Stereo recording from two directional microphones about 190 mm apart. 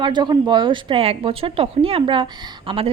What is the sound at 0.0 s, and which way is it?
A woman's voice, 25° right (ahead or behind).